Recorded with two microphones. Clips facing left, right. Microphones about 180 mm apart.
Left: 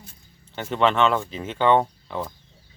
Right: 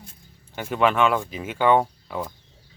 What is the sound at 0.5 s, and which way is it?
Speech, 10° right (ahead or behind).